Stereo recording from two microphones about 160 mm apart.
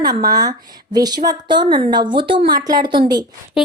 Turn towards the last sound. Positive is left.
turn(degrees=-30)  # may be behind; listen again after turning